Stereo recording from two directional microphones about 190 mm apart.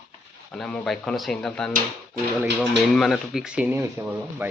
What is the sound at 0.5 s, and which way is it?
Speech, 5° left (ahead or behind).